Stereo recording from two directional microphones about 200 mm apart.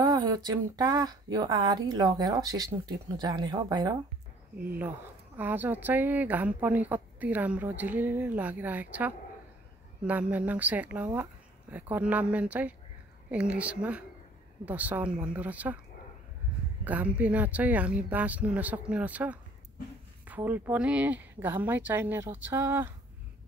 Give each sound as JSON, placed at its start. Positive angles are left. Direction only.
{"t": 0.0, "sound": "speech", "side_deg": -20}
{"t": 5.4, "sound": "a woman's voice", "side_deg": -10}
{"t": 16.8, "sound": "a woman's voice", "side_deg": -10}